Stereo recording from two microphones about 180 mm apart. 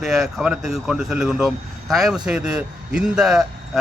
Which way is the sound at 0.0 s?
Centre (ahead or behind).